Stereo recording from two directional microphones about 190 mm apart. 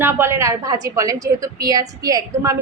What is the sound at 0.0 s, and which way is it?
A woman's voice, 15° right (ahead or behind).